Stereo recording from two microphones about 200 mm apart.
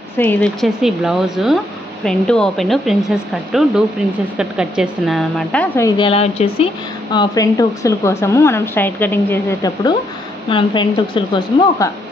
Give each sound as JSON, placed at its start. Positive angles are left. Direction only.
{"t": 0.2, "sound": "a woman's voice", "side_deg": 5}
{"t": 4.4, "sound": "a woman's voice", "side_deg": -5}
{"t": 5.9, "sound": "a woman's voice", "side_deg": 25}